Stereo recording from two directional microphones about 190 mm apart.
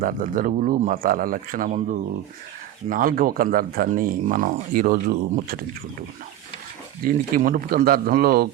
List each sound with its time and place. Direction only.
0.0 s speech: 45° right (ahead or behind)
7.0 s speech: 50° right (ahead or behind)